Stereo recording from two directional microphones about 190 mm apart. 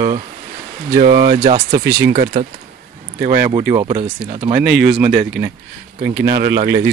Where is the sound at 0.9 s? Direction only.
50° right (ahead or behind).